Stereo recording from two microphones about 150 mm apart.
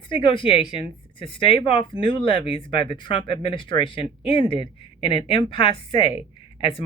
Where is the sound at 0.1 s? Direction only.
35° left (ahead or behind).